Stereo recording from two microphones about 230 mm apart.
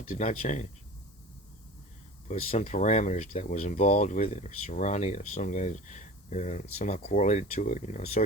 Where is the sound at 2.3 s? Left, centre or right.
Left.